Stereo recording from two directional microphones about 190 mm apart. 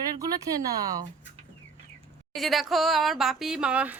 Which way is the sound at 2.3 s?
Centre (ahead or behind).